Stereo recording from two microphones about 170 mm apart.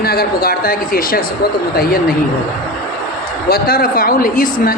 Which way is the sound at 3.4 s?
65° left (ahead or behind).